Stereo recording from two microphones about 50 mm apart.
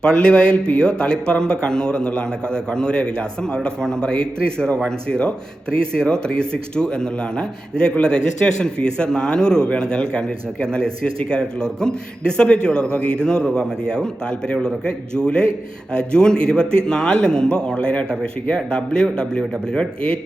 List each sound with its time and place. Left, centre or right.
0.0 s a man's voice: centre